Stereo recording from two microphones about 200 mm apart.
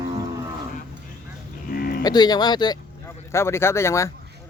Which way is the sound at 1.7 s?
45° left (ahead or behind).